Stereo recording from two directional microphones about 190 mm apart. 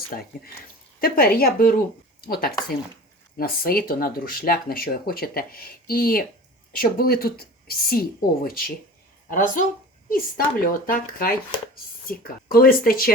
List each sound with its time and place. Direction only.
0.1 s speech: 45° left (ahead or behind)